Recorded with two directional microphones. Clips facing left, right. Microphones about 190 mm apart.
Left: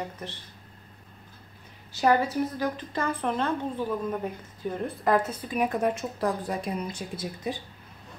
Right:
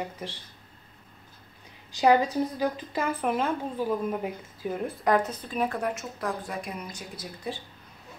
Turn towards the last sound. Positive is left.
turn(degrees=25)  # may be behind; listen again after turning